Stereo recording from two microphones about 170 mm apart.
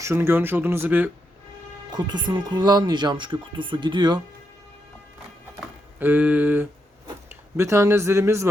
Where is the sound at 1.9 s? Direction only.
25° right (ahead or behind).